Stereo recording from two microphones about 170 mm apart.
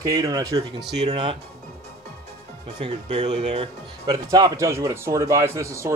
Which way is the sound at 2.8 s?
40° right (ahead or behind).